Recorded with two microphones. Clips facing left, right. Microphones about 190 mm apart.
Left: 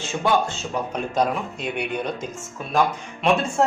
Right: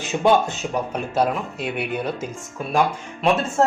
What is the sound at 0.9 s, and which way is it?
Speech, 5° right (ahead or behind).